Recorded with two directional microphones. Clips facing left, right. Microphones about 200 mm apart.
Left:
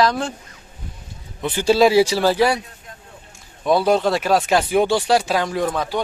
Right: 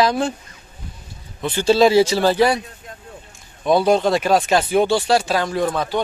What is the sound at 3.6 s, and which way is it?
A man's voice, 5° left (ahead or behind).